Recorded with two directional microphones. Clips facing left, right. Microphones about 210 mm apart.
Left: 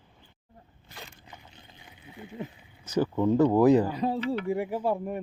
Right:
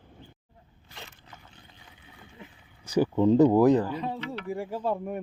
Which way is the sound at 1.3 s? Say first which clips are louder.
Left 1 dB; 20° left (ahead or behind).